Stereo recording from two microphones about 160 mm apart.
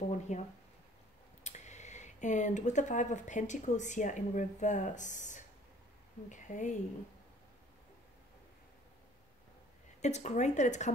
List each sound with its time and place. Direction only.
0.3 s speech: 45° left (ahead or behind)
10.0 s speech: 45° left (ahead or behind)